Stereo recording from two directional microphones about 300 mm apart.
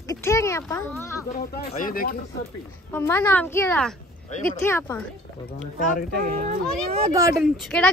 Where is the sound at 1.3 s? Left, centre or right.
Left.